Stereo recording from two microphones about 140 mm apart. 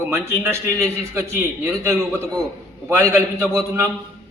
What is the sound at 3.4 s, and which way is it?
Speech, 5° left (ahead or behind).